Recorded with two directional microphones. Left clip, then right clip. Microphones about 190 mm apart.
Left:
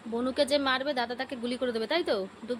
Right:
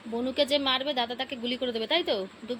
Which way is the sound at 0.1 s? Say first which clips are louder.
Right 1 dB; centre (ahead or behind).